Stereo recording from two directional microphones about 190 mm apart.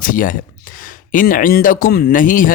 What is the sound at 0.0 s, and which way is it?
Speech, 45° left (ahead or behind).